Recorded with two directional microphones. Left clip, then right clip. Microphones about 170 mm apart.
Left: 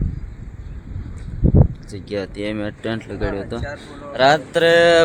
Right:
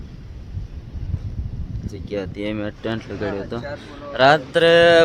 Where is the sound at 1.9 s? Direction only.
10° left (ahead or behind).